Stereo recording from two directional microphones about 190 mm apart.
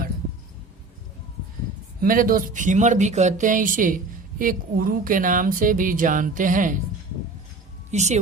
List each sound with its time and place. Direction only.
2.0 s speech: 45° right (ahead or behind)
7.9 s speech: 35° right (ahead or behind)